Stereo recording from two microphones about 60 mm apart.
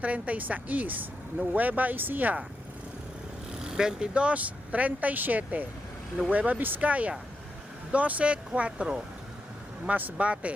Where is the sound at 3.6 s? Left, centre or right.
Centre.